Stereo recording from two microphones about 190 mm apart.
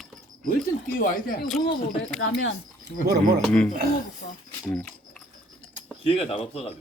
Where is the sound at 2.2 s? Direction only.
80° left.